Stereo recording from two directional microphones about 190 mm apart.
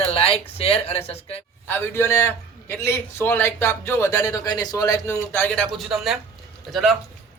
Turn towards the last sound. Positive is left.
turn(degrees=0)  # may be behind; listen again after turning